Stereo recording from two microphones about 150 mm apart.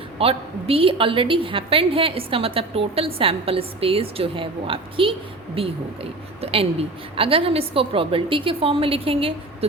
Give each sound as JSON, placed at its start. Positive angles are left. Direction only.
{"t": 0.2, "sound": "a woman's voice", "side_deg": -40}